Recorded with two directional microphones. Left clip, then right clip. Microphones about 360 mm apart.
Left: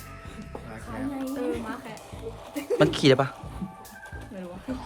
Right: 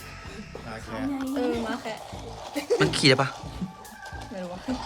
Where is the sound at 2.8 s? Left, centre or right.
Centre.